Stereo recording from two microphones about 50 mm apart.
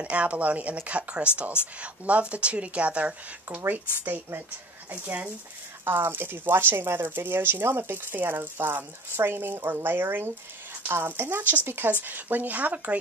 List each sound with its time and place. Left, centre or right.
0.0 s speech: right
3.4 s speech: right